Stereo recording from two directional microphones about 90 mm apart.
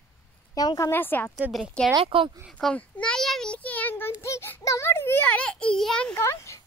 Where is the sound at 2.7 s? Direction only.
15° left (ahead or behind).